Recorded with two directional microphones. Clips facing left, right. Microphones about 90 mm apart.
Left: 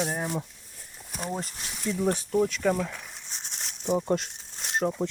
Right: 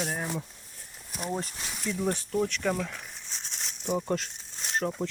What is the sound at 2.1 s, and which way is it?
Speech, 15° left (ahead or behind).